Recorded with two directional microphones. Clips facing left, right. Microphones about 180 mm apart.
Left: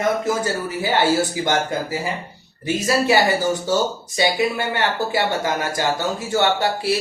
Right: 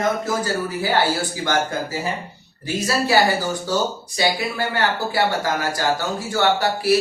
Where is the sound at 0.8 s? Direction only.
20° left (ahead or behind).